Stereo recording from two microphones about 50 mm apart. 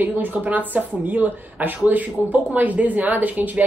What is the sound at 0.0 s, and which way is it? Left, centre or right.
Speech, right.